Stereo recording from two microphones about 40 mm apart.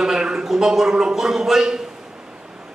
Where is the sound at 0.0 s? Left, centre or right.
Centre.